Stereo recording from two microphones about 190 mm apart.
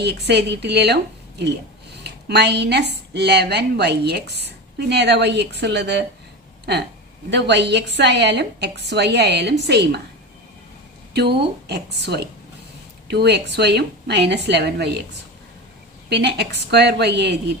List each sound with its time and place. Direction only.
0.0 s speech: 60° right (ahead or behind)
7.3 s speech: 65° right (ahead or behind)
11.1 s speech: 60° right (ahead or behind)
16.0 s speech: 60° right (ahead or behind)